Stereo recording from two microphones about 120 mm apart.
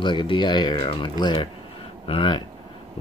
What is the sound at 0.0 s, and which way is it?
Speech, 40° left (ahead or behind).